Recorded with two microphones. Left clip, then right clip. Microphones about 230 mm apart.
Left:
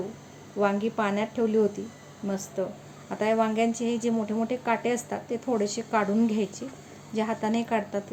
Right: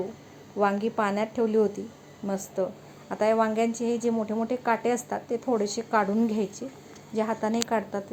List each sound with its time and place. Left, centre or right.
0.6 s a woman's voice: centre